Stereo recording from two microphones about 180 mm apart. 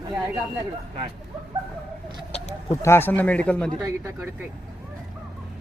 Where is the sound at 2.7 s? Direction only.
15° left (ahead or behind).